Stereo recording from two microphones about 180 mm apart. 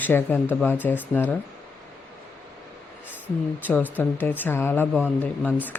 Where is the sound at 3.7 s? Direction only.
10° left (ahead or behind).